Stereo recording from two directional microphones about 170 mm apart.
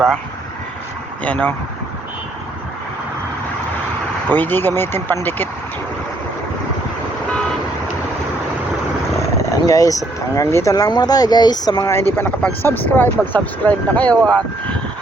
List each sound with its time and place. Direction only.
1.2 s speech: 10° left (ahead or behind)
4.4 s speech: 10° left (ahead or behind)
9.6 s speech: 20° left (ahead or behind)